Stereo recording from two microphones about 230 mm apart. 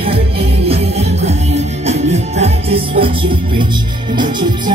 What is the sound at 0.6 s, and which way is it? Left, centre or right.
Music, right.